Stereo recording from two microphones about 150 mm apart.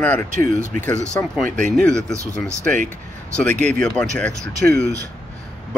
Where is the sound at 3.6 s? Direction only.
5° left (ahead or behind).